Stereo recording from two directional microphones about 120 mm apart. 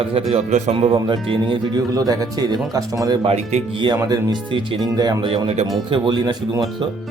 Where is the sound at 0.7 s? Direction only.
45° right (ahead or behind).